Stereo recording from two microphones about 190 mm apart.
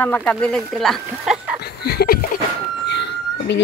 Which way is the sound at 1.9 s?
55° left (ahead or behind).